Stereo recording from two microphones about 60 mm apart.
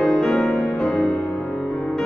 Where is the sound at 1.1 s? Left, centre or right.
Left.